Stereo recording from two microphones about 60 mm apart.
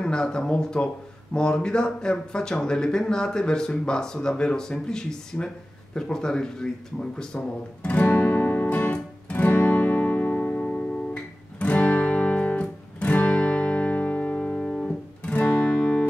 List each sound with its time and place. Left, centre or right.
0.0 s speech: centre
8.1 s music: left; by 15.3 s centre
15.3 s music: left